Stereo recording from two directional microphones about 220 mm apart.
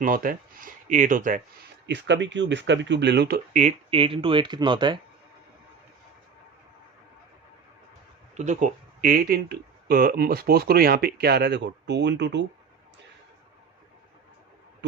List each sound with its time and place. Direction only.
0.0 s speech: 40° right (ahead or behind)
1.9 s speech: 55° right (ahead or behind); by 4.9 s 20° right (ahead or behind)
8.4 s speech: 35° right (ahead or behind); by 12.5 s 50° right (ahead or behind)